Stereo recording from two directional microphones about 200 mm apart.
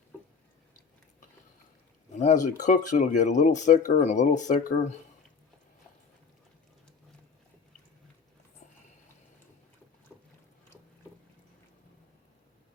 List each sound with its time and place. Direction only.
2.1 s speech: 35° left (ahead or behind)
10.1 s boat: 10° left (ahead or behind)